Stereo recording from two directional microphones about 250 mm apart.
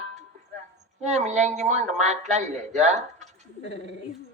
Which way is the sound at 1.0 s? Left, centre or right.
Right.